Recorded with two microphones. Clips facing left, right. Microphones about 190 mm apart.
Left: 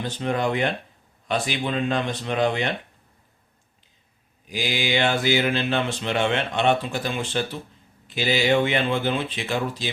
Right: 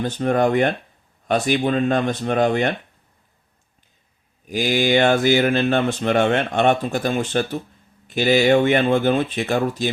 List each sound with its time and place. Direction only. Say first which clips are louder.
0.0 s speech: right 6 dB; 50° right (ahead or behind)
4.4 s speech: right 7 dB; 50° right (ahead or behind)